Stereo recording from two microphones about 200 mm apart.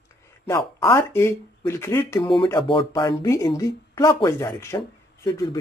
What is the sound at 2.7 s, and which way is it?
Speech, 25° left (ahead or behind).